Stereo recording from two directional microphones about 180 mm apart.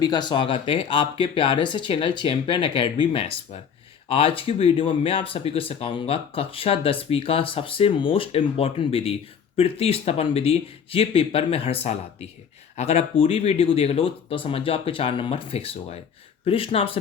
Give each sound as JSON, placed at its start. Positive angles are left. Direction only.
{"t": 0.0, "sound": "speech", "side_deg": 25}